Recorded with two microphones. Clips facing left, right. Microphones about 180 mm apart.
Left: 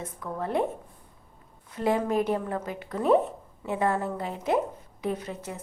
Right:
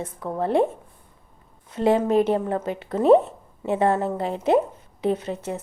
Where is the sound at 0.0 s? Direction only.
30° right (ahead or behind).